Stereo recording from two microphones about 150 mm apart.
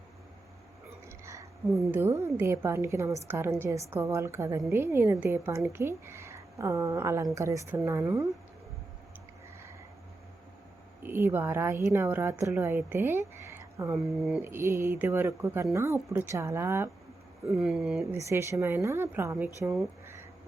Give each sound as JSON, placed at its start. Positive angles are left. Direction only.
{"t": 1.2, "sound": "a sound", "side_deg": -20}
{"t": 1.9, "sound": "a woman's voice", "side_deg": -20}
{"t": 11.0, "sound": "a woman's voice", "side_deg": -15}
{"t": 13.9, "sound": "speech", "side_deg": -5}
{"t": 14.4, "sound": "a woman's voice", "side_deg": -15}
{"t": 17.5, "sound": "speech", "side_deg": -5}
{"t": 18.0, "sound": "a woman's voice", "side_deg": -20}
{"t": 19.6, "sound": "speech", "side_deg": 0}